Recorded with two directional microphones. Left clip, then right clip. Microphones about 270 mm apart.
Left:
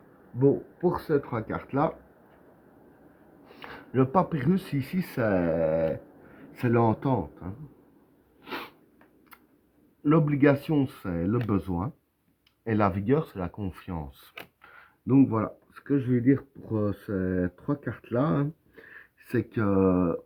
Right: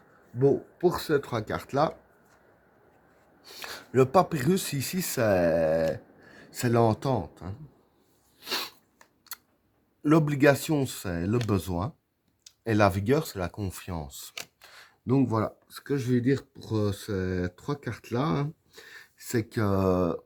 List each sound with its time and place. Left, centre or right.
0.3 s speech: right
3.6 s speech: right
8.4 s a sound: right
10.0 s speech: right